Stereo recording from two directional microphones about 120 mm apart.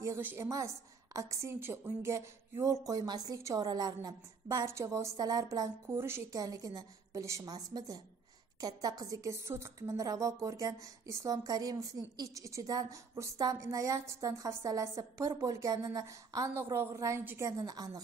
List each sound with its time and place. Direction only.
0.0 s a woman's voice: 20° right (ahead or behind)
17.5 s a woman's voice: 30° right (ahead or behind)